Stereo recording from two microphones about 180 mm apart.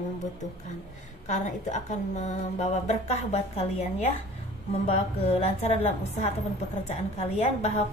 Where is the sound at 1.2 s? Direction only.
40° left (ahead or behind).